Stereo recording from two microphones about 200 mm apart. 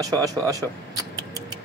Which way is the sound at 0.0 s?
20° right (ahead or behind).